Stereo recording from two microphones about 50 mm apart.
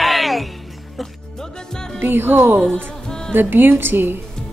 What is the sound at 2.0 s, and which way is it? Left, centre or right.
Speech, right.